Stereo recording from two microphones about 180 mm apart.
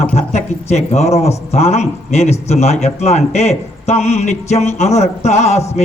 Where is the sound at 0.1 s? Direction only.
40° left (ahead or behind).